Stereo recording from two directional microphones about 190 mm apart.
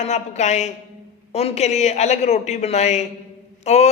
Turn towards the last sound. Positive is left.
turn(degrees=35)  # may be behind; listen again after turning